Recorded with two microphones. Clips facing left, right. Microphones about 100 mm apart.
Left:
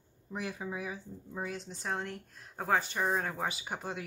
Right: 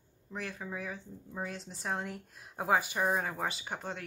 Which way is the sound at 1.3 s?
Centre (ahead or behind).